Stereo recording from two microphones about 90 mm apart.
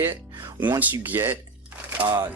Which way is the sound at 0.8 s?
25° right (ahead or behind).